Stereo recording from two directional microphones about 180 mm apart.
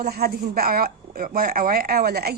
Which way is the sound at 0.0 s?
60° right (ahead or behind).